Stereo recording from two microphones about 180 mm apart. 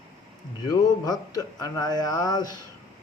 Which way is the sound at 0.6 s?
20° left (ahead or behind).